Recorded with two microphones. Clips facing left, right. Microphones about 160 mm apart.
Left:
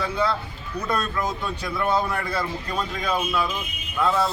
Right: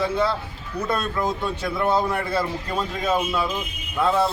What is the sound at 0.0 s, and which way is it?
A man's voice, 30° right (ahead or behind).